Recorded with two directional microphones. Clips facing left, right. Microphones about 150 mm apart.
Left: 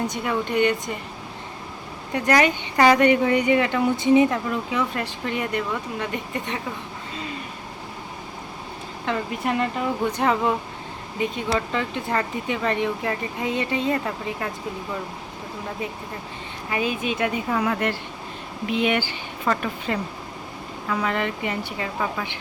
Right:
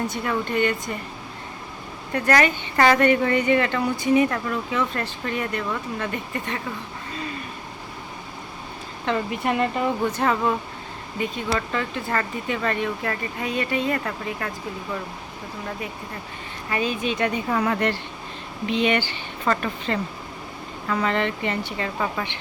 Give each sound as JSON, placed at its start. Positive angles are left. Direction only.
{"t": 0.1, "sound": "speech", "side_deg": 15}
{"t": 2.1, "sound": "speech", "side_deg": 15}
{"t": 9.0, "sound": "speech", "side_deg": 0}
{"t": 10.2, "sound": "speech", "side_deg": 15}
{"t": 16.6, "sound": "speech", "side_deg": 10}